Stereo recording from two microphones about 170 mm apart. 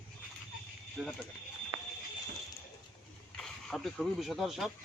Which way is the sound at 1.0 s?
Centre (ahead or behind).